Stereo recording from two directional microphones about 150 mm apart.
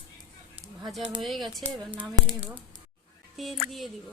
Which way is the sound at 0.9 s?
Centre (ahead or behind).